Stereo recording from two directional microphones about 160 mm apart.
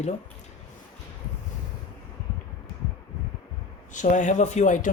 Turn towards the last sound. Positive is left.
turn(degrees=50)  # may be behind; listen again after turning